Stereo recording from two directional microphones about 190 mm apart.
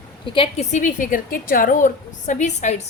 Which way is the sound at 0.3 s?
30° left (ahead or behind).